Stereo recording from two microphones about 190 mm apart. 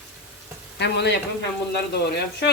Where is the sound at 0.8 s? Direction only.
65° left (ahead or behind).